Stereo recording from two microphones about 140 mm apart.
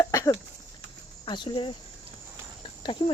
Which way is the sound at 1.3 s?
35° left (ahead or behind).